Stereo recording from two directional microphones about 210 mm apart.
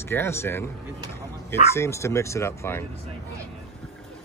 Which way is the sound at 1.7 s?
15° left (ahead or behind).